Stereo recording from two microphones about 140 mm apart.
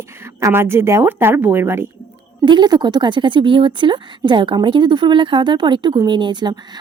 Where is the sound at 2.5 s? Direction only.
30° right (ahead or behind).